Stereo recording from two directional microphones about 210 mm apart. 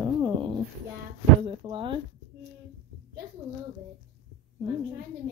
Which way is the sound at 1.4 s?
25° right (ahead or behind).